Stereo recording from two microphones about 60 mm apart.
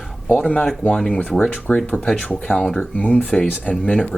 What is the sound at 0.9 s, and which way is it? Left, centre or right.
Speech, centre.